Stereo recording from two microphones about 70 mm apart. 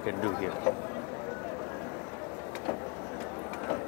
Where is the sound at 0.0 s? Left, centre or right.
Left.